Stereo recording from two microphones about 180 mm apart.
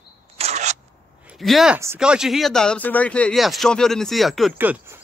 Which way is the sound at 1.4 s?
Centre (ahead or behind).